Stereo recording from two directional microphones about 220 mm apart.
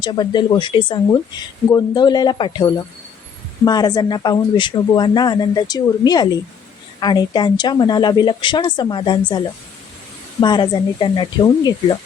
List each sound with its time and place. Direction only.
0.0 s speech: 20° left (ahead or behind)
10.4 s speech: 20° left (ahead or behind)